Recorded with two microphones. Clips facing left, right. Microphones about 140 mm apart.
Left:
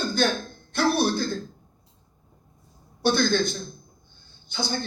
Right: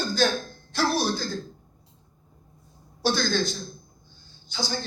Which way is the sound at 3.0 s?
55° left (ahead or behind).